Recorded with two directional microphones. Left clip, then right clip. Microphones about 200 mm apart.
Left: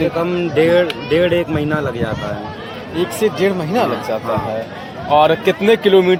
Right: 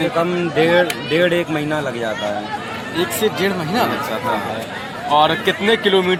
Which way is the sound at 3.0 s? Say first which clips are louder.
Left 2 dB; 55° left (ahead or behind).